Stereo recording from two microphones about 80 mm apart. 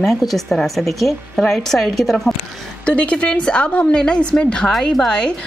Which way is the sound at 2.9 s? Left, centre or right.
Centre.